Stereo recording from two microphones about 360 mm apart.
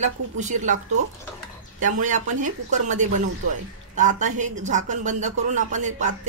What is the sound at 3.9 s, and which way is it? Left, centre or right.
Speech, right.